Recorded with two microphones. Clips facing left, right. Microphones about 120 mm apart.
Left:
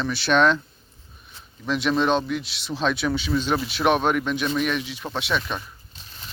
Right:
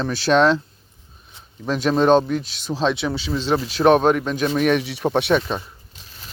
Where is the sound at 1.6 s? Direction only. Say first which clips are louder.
Right 5 dB; 40° right (ahead or behind).